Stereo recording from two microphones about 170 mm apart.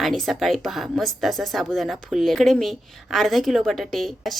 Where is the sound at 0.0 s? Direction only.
Centre (ahead or behind).